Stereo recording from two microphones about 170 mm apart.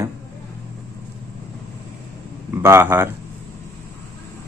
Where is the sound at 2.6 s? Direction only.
15° right (ahead or behind).